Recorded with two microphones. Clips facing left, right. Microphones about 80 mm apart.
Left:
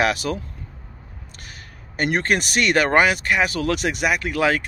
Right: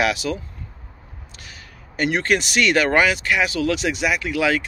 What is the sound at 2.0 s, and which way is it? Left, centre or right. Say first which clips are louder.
Speech: right 1 dB; left.